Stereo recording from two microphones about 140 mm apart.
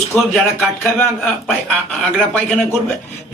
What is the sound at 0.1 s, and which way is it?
Speech, 15° left (ahead or behind).